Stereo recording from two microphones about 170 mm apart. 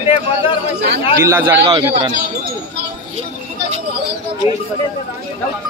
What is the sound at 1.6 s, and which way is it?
Speech, 30° right (ahead or behind).